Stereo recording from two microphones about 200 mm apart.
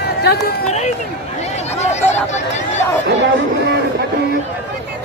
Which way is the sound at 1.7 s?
35° left (ahead or behind).